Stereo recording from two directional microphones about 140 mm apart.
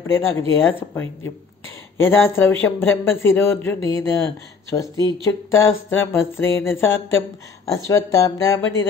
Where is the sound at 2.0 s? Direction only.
15° left (ahead or behind).